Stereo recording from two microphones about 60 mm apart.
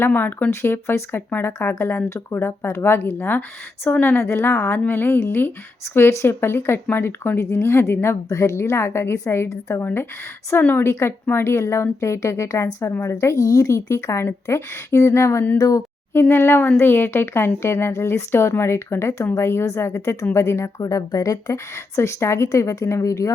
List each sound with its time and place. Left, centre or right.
0.0 s a woman's voice: left
7.3 s a woman's voice: left
8.3 s a woman's voice: left
9.5 s a woman's voice: left
9.8 s speech: left
10.8 s a woman's voice: left
13.1 s a woman's voice: left
15.5 s a woman's voice: left
16.3 s a woman's voice: left
20.8 s a woman's voice: left